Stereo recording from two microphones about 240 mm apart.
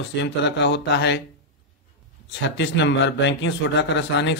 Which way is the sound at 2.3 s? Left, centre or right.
Left.